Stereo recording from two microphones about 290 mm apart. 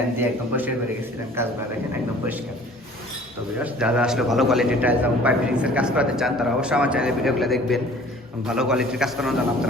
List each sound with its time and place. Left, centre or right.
0.2 s a man's voice: centre
3.6 s a man's voice: centre